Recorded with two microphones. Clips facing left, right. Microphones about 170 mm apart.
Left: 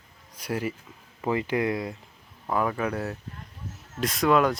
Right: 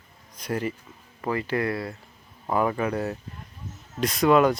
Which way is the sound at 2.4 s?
5° right (ahead or behind).